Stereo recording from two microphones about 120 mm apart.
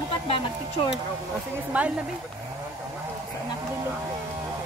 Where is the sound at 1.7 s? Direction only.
15° right (ahead or behind).